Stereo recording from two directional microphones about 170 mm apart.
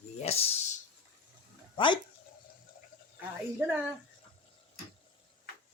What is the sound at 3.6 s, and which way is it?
Speech, 10° right (ahead or behind).